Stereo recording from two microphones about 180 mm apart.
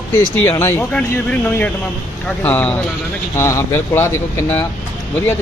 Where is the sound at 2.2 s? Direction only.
10° left (ahead or behind).